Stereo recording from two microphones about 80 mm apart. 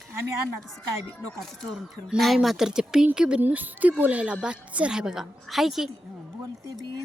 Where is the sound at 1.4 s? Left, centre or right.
Centre.